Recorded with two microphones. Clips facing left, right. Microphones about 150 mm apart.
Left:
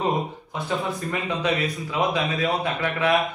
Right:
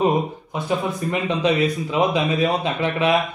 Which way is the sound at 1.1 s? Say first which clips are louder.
Right 5 dB; 25° right (ahead or behind).